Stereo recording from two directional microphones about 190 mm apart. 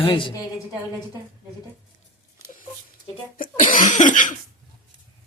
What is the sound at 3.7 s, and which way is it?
Cough, 40° left (ahead or behind).